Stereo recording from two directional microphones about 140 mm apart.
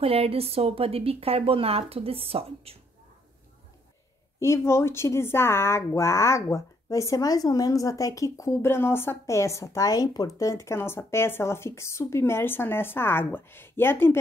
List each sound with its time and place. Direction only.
0.0 s speech: 45° right (ahead or behind)
4.4 s speech: 20° left (ahead or behind)